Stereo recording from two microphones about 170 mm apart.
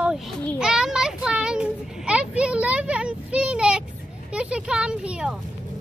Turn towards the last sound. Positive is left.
turn(degrees=-5)  # may be behind; listen again after turning